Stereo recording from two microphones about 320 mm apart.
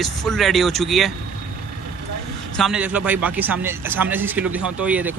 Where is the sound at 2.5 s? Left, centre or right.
Centre.